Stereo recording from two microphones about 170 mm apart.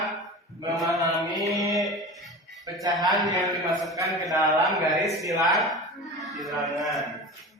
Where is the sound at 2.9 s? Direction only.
Centre (ahead or behind).